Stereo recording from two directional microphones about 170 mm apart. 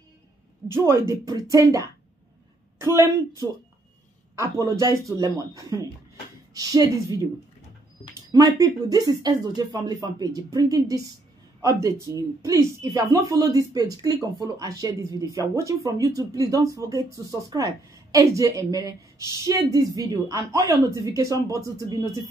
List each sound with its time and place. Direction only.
0.7 s a man's voice: 15° right (ahead or behind)